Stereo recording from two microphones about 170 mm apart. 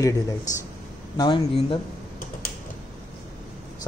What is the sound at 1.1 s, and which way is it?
Speech, 25° left (ahead or behind).